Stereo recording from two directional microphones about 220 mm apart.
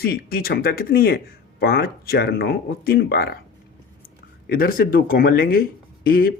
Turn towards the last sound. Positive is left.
turn(degrees=40)  # may be behind; listen again after turning